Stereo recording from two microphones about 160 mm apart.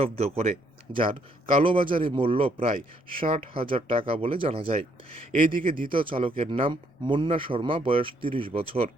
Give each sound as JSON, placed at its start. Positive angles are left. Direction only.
{"t": 0.0, "sound": "a man's voice", "side_deg": -40}
{"t": 1.5, "sound": "a man's voice", "side_deg": -30}